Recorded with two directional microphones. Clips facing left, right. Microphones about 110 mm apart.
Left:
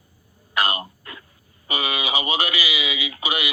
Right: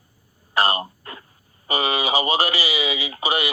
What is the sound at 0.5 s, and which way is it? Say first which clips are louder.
Throat clearing: right 3 dB; 35° right (ahead or behind).